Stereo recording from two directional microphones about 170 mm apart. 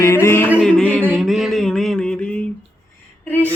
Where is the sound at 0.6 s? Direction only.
5° left (ahead or behind).